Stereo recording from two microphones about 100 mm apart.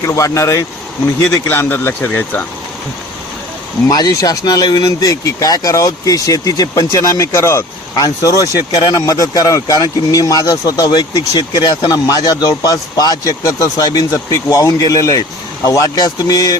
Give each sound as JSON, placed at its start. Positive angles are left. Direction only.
{"t": 0.0, "sound": "speech", "side_deg": 30}
{"t": 3.9, "sound": "speech", "side_deg": 35}